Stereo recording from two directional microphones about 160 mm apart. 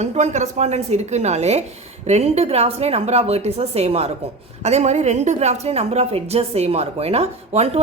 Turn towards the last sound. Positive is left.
turn(degrees=-40)  # may be behind; listen again after turning